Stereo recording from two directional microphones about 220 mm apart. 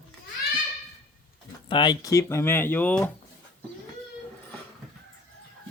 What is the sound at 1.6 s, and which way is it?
Speech, 20° left (ahead or behind).